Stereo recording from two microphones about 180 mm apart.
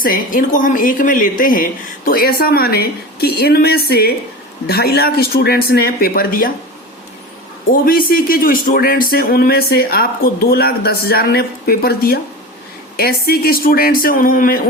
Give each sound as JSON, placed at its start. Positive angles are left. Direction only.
{"t": 0.0, "sound": "speech", "side_deg": 50}
{"t": 7.7, "sound": "speech", "side_deg": 55}